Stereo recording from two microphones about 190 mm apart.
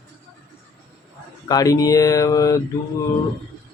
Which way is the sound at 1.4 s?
20° left (ahead or behind).